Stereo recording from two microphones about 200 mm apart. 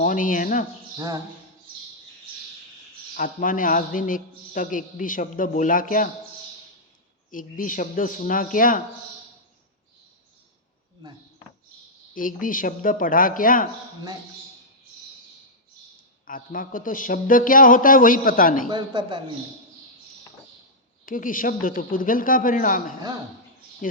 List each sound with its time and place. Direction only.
0.0 s speech: 40° left (ahead or behind)
0.9 s a man's voice: 20° right (ahead or behind)
3.2 s a man's voice: 40° left (ahead or behind)
7.3 s speech: 45° left (ahead or behind)
12.1 s speech: 45° left (ahead or behind)
16.2 s speech: 45° left (ahead or behind)
18.7 s a man's voice: 20° right (ahead or behind)
21.0 s speech: 45° left (ahead or behind)